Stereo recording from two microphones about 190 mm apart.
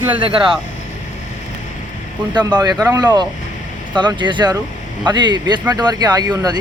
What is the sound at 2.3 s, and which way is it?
Speech, 20° right (ahead or behind).